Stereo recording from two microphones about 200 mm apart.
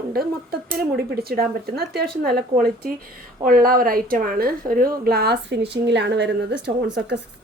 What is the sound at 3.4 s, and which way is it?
A woman's voice, 45° right (ahead or behind).